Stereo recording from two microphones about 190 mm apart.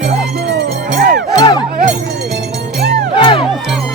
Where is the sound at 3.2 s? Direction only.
25° left (ahead or behind).